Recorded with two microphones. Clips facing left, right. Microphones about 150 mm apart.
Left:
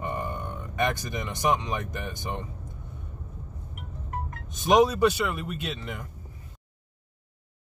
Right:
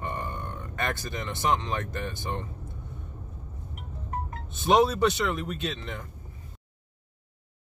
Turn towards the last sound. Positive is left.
turn(degrees=10)  # may be behind; listen again after turning